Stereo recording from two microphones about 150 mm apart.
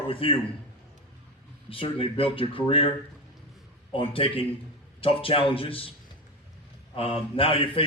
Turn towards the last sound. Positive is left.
turn(degrees=40)  # may be behind; listen again after turning